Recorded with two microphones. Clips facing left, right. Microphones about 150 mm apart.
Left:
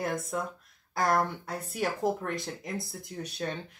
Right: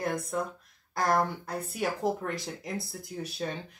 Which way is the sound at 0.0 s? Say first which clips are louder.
Right 1 dB; centre (ahead or behind).